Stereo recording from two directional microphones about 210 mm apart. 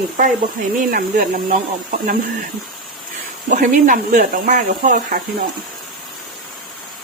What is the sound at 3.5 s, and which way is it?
Speech, 40° right (ahead or behind).